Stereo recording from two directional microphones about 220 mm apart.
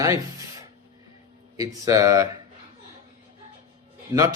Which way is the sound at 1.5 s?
15° right (ahead or behind).